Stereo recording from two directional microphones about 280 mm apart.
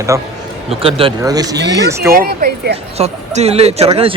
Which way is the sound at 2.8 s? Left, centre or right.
Right.